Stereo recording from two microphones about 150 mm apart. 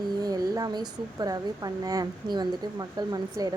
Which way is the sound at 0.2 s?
25° right (ahead or behind).